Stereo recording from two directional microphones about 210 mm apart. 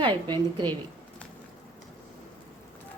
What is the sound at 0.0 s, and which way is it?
Speech, 20° right (ahead or behind).